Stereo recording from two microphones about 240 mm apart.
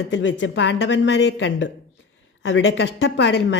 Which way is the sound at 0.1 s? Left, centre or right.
Left.